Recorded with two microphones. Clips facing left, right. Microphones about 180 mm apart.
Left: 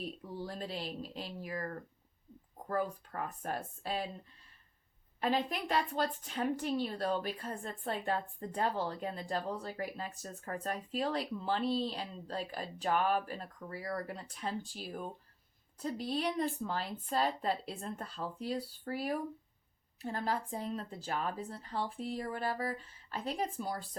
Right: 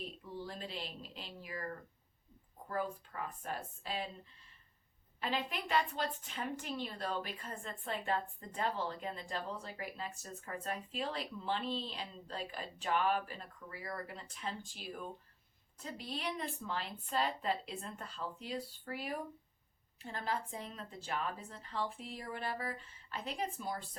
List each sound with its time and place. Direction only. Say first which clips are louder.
0.3 s a woman's voice: left 3 dB; 40° left (ahead or behind)
2.6 s speech: left 4 dB; 45° left (ahead or behind)
5.2 s a woman's voice: left 5 dB; 40° left (ahead or behind)